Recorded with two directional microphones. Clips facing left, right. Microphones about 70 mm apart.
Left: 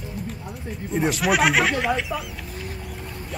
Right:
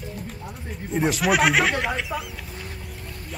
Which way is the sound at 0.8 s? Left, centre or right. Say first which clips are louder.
Even; centre.